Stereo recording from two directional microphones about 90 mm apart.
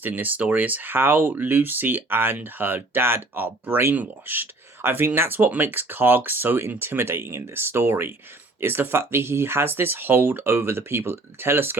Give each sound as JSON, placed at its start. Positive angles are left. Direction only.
{"t": 0.0, "sound": "speech", "side_deg": -20}